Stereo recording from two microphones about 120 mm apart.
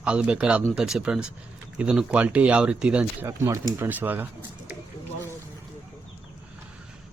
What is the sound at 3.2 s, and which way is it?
Speech, 30° right (ahead or behind).